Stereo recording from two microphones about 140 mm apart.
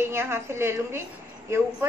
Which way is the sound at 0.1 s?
20° right (ahead or behind).